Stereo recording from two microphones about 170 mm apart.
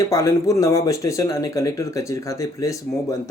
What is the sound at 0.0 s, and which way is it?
Speech, 20° left (ahead or behind).